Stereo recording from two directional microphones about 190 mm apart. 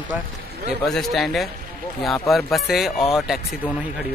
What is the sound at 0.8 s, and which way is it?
Speech, centre (ahead or behind).